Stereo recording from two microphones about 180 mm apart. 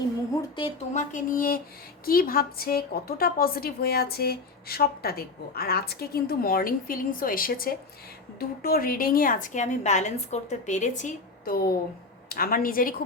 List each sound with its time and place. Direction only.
0.9 s a woman's voice: 45° left (ahead or behind)